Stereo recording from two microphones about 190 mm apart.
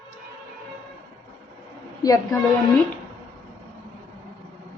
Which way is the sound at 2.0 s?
20° left (ahead or behind).